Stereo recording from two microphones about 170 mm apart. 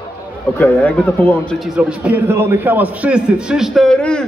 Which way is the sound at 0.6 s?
10° left (ahead or behind).